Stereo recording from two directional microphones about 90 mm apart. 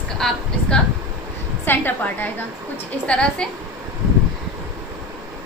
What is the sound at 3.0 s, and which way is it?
Speech, 10° left (ahead or behind).